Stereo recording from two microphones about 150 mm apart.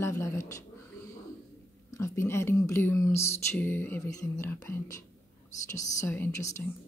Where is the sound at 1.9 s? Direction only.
15° left (ahead or behind).